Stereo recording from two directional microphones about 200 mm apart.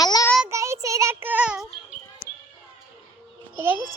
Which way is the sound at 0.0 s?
20° left (ahead or behind).